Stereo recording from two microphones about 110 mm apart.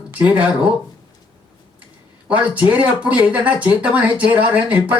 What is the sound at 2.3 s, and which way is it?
Speech, 15° right (ahead or behind).